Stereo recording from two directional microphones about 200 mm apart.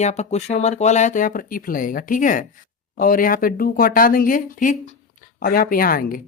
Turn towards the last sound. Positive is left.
turn(degrees=45)  # may be behind; listen again after turning